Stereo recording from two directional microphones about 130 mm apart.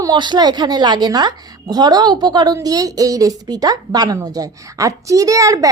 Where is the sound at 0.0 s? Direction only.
35° right (ahead or behind).